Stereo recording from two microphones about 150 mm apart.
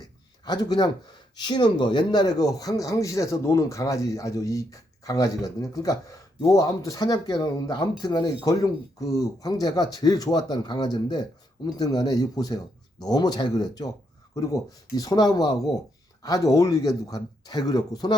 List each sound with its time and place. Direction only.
0.4 s speech: 25° left (ahead or behind)